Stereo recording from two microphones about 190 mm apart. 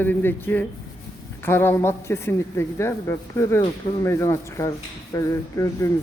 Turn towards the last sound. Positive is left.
turn(degrees=15)  # may be behind; listen again after turning